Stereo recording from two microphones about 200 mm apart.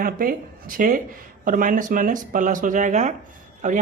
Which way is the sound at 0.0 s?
45° right (ahead or behind).